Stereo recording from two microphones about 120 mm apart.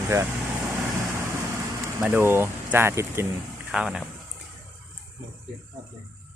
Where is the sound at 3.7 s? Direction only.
5° right (ahead or behind).